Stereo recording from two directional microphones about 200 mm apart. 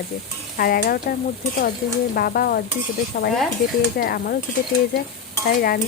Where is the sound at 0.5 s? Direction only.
50° left (ahead or behind).